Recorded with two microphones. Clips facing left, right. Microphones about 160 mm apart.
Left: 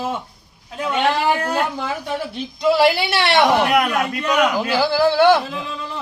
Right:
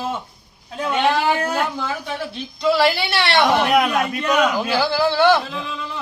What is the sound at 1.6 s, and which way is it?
A man's voice, 15° left (ahead or behind).